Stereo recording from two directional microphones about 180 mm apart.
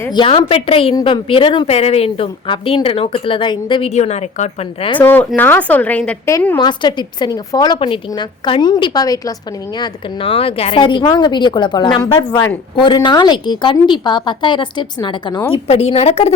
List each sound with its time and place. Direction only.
0.0 s a woman's voice: 25° left (ahead or behind)
4.9 s a woman's voice: 10° left (ahead or behind)
6.6 s a woman's voice: 25° left (ahead or behind)
15.5 s a woman's voice: 35° left (ahead or behind)